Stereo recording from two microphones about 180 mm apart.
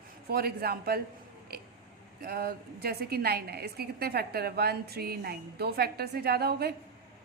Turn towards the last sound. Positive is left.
turn(degrees=-60)  # may be behind; listen again after turning